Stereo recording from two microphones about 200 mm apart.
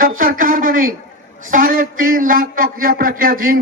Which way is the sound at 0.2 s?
45° right (ahead or behind).